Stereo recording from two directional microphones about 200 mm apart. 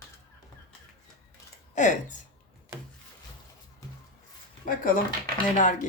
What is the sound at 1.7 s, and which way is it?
Speech, 40° left (ahead or behind).